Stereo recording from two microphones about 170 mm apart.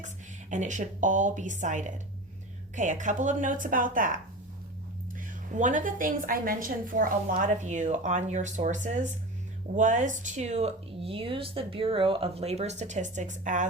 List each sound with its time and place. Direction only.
0.5 s a woman's voice: 45° right (ahead or behind)
5.5 s a woman's voice: 50° right (ahead or behind)